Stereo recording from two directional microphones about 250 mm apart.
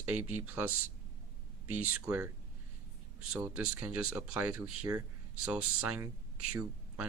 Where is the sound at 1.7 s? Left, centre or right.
Centre.